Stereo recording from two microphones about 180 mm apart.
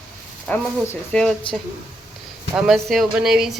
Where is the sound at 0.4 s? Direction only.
5° left (ahead or behind).